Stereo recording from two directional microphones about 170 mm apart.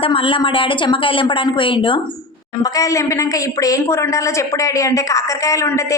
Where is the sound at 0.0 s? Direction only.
30° left (ahead or behind).